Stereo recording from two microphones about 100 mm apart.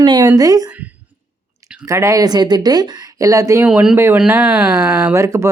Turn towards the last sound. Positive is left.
turn(degrees=-30)  # may be behind; listen again after turning